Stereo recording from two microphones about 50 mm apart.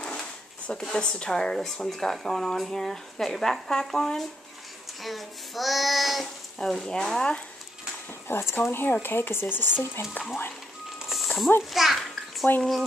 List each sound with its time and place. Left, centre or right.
0.0 s a sound: centre
0.7 s a child's voice: centre
6.7 s speech: centre
8.3 s speech: left
8.5 s speech: left
10.0 s speech: left
11.0 s a sound: centre
11.7 s bathtub: centre